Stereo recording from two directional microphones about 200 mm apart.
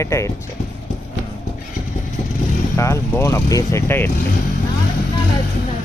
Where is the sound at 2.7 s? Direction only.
15° left (ahead or behind).